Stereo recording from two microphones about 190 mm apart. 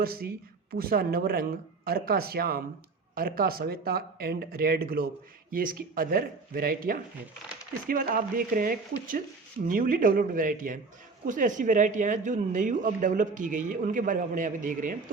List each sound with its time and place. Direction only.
0.0 s speech: 50° right (ahead or behind)